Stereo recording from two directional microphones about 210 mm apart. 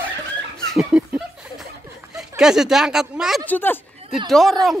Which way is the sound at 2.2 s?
5° right (ahead or behind).